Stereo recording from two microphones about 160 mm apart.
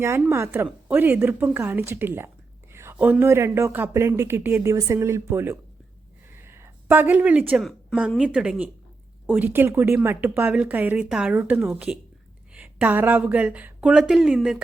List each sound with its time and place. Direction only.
0.0 s speech: 15° right (ahead or behind)
6.4 s a sound: 15° right (ahead or behind)
7.5 s a woman's voice: centre (ahead or behind)